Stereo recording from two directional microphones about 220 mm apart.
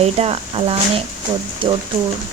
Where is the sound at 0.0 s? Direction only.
30° right (ahead or behind).